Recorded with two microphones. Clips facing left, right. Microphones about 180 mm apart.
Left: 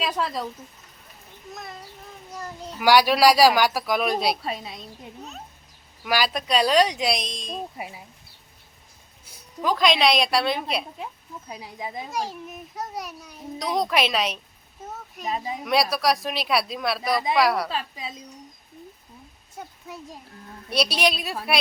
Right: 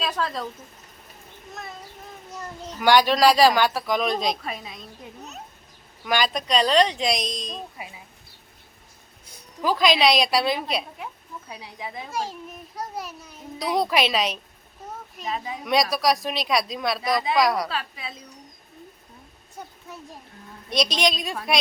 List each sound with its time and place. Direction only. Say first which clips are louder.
0.0 s a child's voice: left 1 dB; 10° left (ahead or behind)
2.3 s a child's voice: left 1 dB; 10° left (ahead or behind)
6.1 s speech: even; 5° left (ahead or behind)
9.6 s speech: right 1 dB; centre (ahead or behind)
11.8 s a child's voice: left 1 dB; 20° left (ahead or behind)
12.8 s speech: even; centre (ahead or behind)
15.6 s speech: right 1 dB; centre (ahead or behind)
20.7 s a child's voice: even; 5° left (ahead or behind)